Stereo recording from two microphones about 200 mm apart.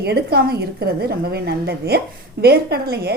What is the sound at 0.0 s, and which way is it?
A woman's voice, 55° right (ahead or behind).